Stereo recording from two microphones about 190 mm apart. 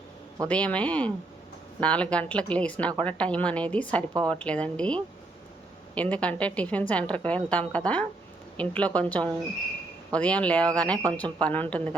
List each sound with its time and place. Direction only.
0.4 s a woman's voice: 5° left (ahead or behind)
4.1 s a woman's voice: 20° right (ahead or behind)
4.4 s a woman's voice: 5° left (ahead or behind)